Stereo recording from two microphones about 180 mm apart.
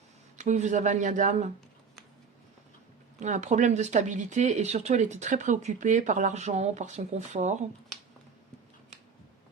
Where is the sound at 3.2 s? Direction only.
40° right (ahead or behind).